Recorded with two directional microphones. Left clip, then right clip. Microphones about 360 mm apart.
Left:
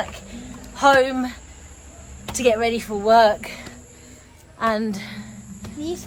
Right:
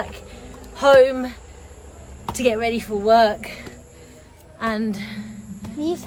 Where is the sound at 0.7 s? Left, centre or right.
Centre.